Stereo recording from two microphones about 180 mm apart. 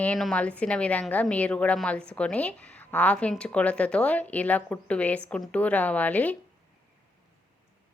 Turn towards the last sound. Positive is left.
turn(degrees=10)  # may be behind; listen again after turning